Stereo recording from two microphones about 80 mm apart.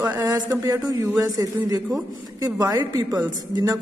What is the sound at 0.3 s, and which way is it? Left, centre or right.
A man's voice, right.